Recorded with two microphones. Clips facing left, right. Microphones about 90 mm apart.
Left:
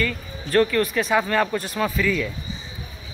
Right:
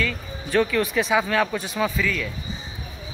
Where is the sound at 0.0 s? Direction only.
Centre (ahead or behind).